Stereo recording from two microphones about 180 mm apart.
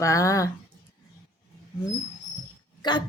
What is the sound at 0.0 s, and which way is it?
Speech, 15° left (ahead or behind).